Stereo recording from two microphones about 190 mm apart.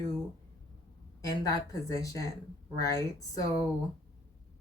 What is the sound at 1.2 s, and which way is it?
Speech, 20° left (ahead or behind).